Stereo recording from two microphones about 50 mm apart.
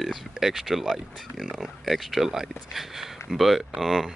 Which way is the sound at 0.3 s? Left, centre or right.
Centre.